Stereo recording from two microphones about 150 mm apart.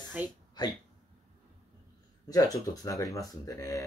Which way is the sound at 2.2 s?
25° left (ahead or behind).